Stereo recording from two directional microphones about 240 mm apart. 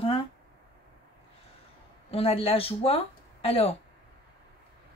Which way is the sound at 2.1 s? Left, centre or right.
Left.